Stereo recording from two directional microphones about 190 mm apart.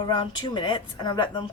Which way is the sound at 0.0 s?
25° left (ahead or behind).